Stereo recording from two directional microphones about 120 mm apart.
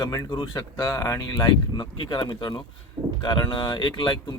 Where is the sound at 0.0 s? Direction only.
35° left (ahead or behind).